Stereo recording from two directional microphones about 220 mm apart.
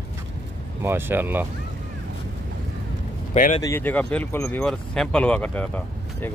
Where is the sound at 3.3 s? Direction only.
35° left (ahead or behind).